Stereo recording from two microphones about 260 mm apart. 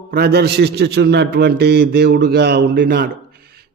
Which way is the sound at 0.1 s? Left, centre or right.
Right.